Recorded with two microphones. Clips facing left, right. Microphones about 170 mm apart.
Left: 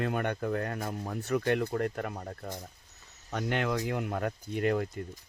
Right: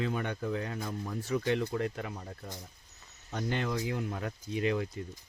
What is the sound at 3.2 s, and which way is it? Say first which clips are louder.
Speech: left 3 dB; 60° left (ahead or behind).